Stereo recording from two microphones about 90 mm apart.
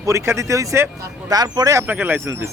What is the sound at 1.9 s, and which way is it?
Speech, 20° right (ahead or behind).